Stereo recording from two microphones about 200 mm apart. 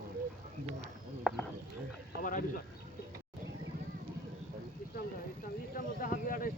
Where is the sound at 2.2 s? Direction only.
40° left (ahead or behind).